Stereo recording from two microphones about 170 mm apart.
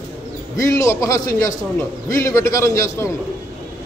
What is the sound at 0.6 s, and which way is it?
A man's voice, 20° left (ahead or behind).